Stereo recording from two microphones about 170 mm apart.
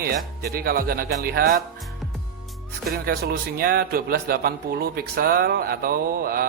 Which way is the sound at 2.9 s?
65° right (ahead or behind).